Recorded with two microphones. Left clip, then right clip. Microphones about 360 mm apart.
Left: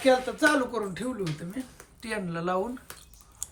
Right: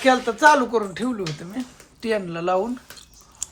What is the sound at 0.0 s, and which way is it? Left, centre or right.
Speech, centre.